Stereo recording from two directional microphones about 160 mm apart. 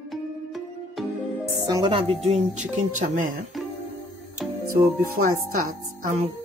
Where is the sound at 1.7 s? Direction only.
30° right (ahead or behind); by 3.3 s 50° right (ahead or behind).